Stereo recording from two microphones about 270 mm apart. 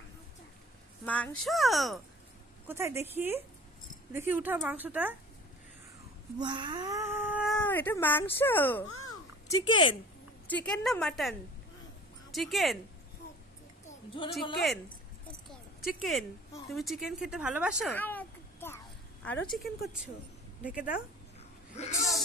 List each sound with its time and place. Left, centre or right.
1.0 s a woman's voice: centre
6.3 s speech: centre
13.8 s a sound: centre
15.9 s speech: centre
21.7 s speech: left